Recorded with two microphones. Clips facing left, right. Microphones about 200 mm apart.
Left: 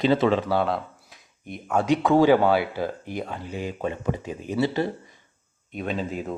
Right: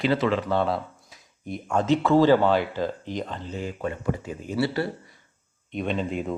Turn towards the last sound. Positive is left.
turn(degrees=0)  # may be behind; listen again after turning